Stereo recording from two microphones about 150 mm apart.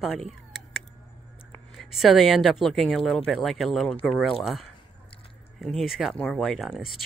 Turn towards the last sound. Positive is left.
turn(degrees=0)  # may be behind; listen again after turning